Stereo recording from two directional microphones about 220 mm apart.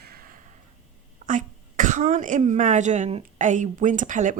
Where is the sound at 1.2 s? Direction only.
35° right (ahead or behind).